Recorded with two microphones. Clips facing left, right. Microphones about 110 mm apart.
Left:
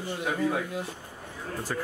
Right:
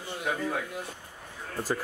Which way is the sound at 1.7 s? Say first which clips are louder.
Right 2 dB; 15° right (ahead or behind).